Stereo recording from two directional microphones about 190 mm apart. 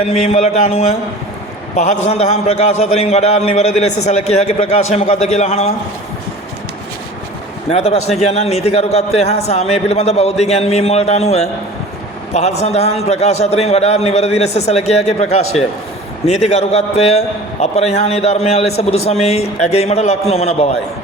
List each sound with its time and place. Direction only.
0.0 s a man's voice: 35° left (ahead or behind)
7.7 s a man's voice: 30° left (ahead or behind)